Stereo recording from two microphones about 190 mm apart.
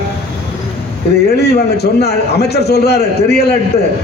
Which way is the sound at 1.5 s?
60° left (ahead or behind).